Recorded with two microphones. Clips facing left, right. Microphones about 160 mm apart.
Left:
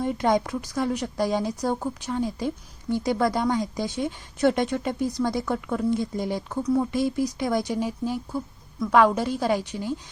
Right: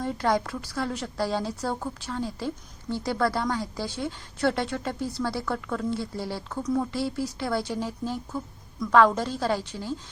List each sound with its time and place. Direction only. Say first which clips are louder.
0.0 s speech: left 3 dB; 15° left (ahead or behind)